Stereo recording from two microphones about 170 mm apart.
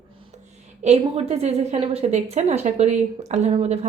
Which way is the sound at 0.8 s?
40° right (ahead or behind).